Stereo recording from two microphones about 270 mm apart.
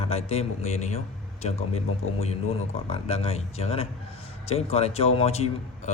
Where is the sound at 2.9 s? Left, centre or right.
Left.